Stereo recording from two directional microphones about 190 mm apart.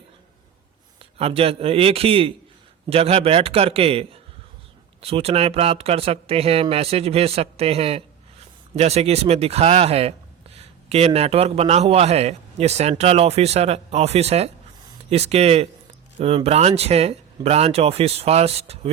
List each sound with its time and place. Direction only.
1.2 s speech: 30° right (ahead or behind)